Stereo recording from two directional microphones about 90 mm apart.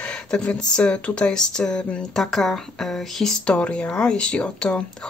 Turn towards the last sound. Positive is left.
turn(degrees=10)  # may be behind; listen again after turning